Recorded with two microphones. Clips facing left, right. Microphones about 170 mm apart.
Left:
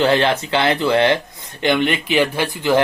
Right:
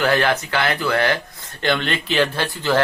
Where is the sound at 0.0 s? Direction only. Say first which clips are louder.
Left 3 dB; 25° left (ahead or behind).